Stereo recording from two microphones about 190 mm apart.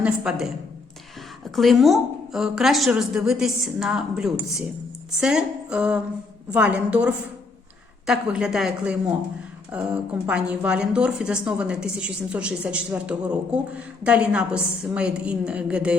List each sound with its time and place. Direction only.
0.0 s a woman's voice: 5° right (ahead or behind)